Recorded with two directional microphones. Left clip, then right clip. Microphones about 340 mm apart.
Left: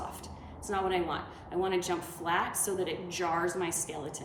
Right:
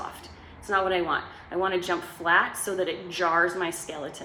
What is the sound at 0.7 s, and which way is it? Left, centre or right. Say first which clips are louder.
A woman's voice: right 7 dB; centre.